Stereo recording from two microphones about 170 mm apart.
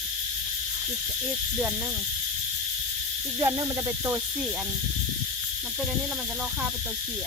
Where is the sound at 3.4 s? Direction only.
20° right (ahead or behind).